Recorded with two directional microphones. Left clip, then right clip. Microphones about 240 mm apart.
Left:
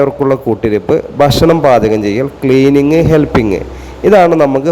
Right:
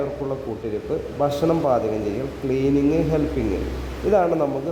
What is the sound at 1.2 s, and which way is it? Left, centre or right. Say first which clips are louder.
Speech: left 11 dB; left.